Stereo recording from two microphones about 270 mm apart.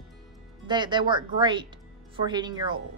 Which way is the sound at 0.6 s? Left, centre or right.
Centre.